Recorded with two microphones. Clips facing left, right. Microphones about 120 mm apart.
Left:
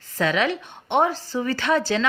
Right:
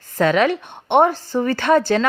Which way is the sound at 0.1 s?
50° right (ahead or behind).